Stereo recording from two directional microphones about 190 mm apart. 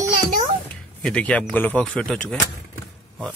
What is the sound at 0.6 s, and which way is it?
A man's voice, 5° left (ahead or behind).